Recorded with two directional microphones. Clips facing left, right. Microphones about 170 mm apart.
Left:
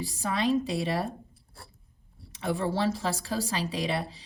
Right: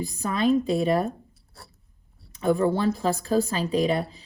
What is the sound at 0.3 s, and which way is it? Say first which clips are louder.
Speech: right 5 dB; 45° right (ahead or behind).